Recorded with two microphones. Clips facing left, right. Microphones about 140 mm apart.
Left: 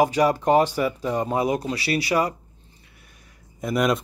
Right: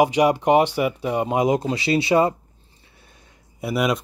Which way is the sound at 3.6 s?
5° right (ahead or behind).